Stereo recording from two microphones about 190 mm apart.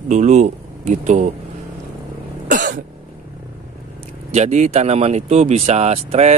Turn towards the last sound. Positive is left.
turn(degrees=-35)  # may be behind; listen again after turning